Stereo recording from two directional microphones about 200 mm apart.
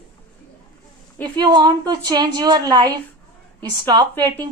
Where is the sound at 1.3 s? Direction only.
20° right (ahead or behind).